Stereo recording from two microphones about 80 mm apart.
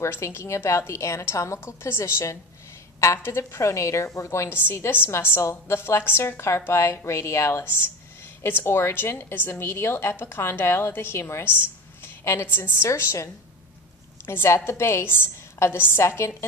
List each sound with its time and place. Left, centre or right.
0.0 s a woman's voice: left